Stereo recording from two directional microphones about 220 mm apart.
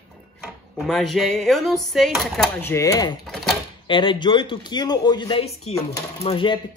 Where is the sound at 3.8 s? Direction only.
20° left (ahead or behind).